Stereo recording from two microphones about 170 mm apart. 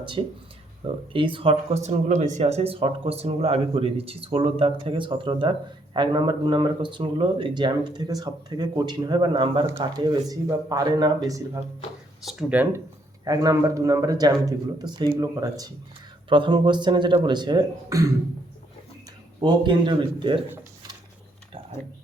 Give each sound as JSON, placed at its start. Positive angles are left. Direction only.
{"t": 0.2, "sound": "speech", "side_deg": -30}
{"t": 12.2, "sound": "speech", "side_deg": 0}
{"t": 13.2, "sound": "speech", "side_deg": -20}
{"t": 19.4, "sound": "speech", "side_deg": -25}